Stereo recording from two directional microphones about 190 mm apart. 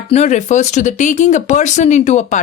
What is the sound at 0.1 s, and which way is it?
Speech, 35° left (ahead or behind).